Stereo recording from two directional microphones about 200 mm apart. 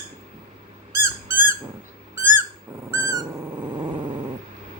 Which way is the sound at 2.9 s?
15° right (ahead or behind).